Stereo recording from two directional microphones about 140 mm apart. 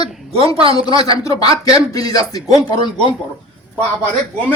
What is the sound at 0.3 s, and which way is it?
Speech, 45° right (ahead or behind).